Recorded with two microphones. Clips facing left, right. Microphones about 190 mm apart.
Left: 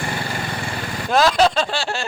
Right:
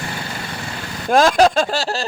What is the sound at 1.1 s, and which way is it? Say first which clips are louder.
Speech: right 3 dB; 45° right (ahead or behind).